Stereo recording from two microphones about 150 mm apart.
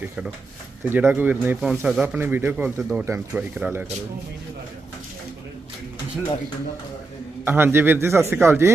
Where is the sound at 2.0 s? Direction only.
15° right (ahead or behind).